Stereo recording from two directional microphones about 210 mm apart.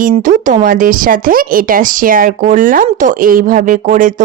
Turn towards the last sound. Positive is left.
turn(degrees=-40)  # may be behind; listen again after turning